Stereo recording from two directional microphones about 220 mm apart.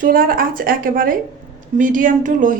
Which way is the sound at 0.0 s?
40° right (ahead or behind).